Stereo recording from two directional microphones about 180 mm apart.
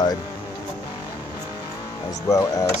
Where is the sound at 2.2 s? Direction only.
20° left (ahead or behind).